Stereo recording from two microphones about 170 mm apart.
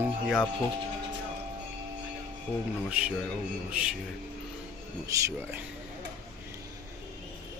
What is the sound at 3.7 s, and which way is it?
Speech, centre (ahead or behind).